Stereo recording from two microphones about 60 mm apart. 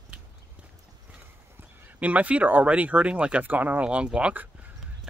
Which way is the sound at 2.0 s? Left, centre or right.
Right.